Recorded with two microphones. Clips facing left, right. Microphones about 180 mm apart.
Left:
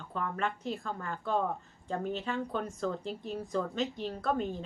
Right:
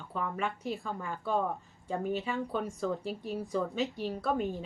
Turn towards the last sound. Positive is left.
turn(degrees=0)  # may be behind; listen again after turning